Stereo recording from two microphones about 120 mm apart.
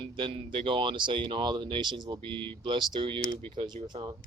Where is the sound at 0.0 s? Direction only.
45° right (ahead or behind).